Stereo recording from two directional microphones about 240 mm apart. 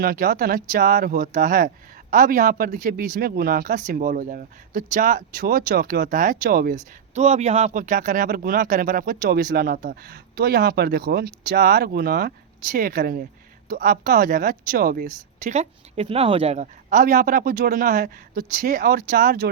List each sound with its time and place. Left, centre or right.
0.0 s speech: right